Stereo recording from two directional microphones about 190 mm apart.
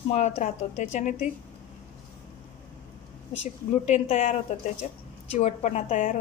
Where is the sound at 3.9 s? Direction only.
45° left (ahead or behind).